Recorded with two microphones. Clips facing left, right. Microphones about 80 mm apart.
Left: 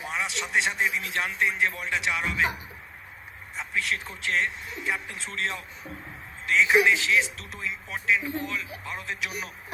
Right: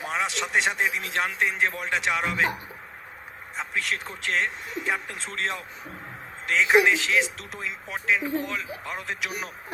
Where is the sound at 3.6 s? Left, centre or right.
Right.